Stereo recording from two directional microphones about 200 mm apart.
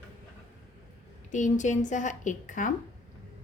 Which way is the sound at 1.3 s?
40° left (ahead or behind).